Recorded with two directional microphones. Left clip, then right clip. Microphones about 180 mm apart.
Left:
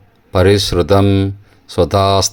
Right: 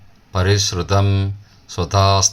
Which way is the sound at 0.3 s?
45° left (ahead or behind).